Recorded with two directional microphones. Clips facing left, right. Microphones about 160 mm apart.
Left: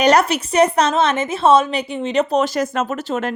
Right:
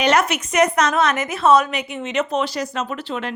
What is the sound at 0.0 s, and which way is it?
A woman's voice, 35° left (ahead or behind).